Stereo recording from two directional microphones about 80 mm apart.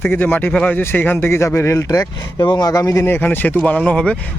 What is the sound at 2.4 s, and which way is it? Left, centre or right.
Speech, left.